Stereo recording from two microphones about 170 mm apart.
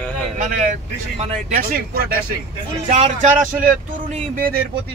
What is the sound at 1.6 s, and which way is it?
Speech, 60° right (ahead or behind).